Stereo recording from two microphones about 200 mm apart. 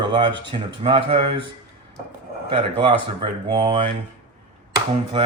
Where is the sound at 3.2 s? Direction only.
25° right (ahead or behind).